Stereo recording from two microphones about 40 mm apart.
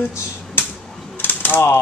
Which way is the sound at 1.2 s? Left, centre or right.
Left.